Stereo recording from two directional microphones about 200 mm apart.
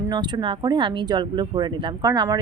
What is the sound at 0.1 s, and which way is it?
Speech, 20° right (ahead or behind).